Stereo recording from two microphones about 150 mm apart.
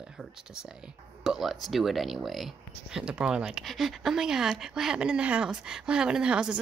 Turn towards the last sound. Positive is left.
turn(degrees=-5)  # may be behind; listen again after turning